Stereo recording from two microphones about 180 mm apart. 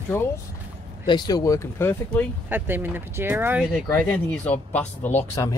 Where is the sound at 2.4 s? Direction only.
10° right (ahead or behind).